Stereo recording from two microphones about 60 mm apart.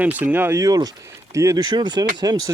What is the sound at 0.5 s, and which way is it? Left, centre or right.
Speech, right.